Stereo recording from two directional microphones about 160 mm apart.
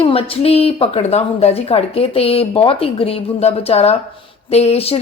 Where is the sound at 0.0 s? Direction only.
35° left (ahead or behind).